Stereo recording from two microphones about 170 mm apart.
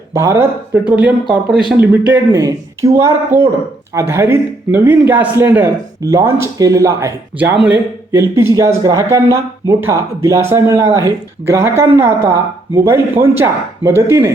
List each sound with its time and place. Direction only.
0.1 s speech: 15° right (ahead or behind)
1.0 s speech: 5° right (ahead or behind)
1.7 s speech: 10° right (ahead or behind)